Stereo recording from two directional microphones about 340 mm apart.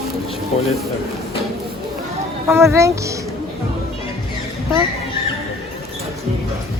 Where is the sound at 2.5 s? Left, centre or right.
Centre.